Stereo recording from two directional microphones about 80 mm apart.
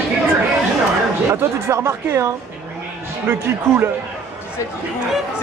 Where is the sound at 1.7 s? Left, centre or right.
Right.